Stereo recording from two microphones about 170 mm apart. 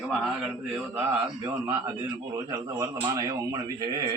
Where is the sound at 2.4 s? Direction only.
20° right (ahead or behind).